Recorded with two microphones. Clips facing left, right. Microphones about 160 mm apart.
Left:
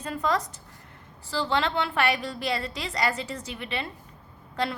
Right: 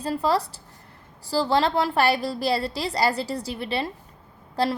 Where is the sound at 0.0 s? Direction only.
35° right (ahead or behind).